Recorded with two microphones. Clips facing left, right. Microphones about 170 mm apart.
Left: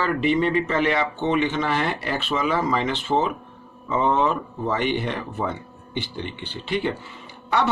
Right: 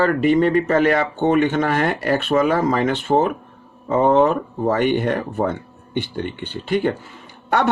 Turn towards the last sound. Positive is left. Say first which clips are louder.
# right 3 dB
turn(degrees=-50)  # may be behind; listen again after turning